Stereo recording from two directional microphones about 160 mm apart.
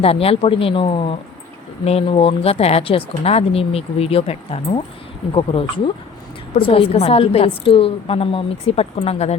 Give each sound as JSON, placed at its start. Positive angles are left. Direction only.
{"t": 0.0, "sound": "speech", "side_deg": 40}